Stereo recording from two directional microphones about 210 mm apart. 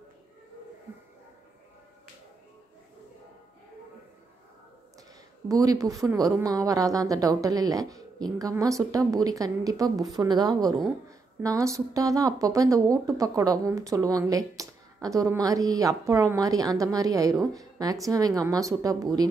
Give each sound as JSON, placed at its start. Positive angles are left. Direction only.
{"t": 5.5, "sound": "a woman's voice", "side_deg": -15}